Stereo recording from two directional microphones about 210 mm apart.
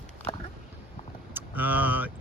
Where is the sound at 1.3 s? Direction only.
10° right (ahead or behind).